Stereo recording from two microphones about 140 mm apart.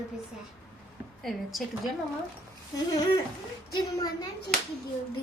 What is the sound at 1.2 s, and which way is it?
Speech, centre (ahead or behind).